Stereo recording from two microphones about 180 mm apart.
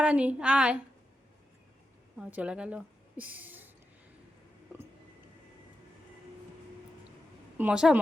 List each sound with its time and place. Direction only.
0.0 s a woman's voice: 10° right (ahead or behind)
2.1 s a woman's voice: 5° right (ahead or behind)
7.6 s a woman's voice: 5° right (ahead or behind)